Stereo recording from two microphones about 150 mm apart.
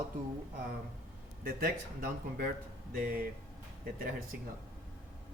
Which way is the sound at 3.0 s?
90° right.